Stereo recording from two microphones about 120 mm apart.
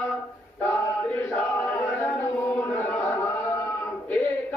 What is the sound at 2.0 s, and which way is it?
Chant, 10° left (ahead or behind).